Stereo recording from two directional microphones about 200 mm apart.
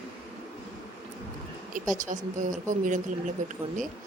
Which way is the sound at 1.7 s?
40° right (ahead or behind).